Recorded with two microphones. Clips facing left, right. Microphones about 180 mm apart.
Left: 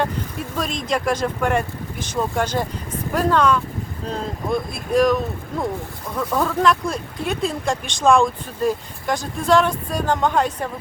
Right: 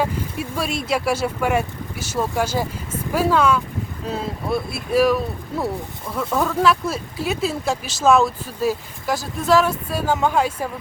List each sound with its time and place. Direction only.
0.0 s speech: 10° right (ahead or behind)